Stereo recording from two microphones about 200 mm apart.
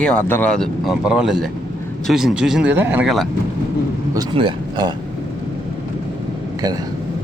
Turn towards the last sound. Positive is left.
turn(degrees=-20)  # may be behind; listen again after turning